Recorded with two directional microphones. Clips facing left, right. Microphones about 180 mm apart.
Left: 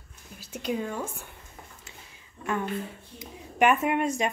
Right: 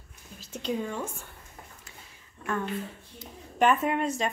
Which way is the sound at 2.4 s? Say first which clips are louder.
Left 1 dB; 15° left (ahead or behind).